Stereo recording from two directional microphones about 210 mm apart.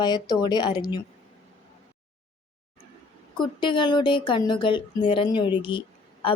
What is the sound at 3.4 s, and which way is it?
Speech, 20° left (ahead or behind).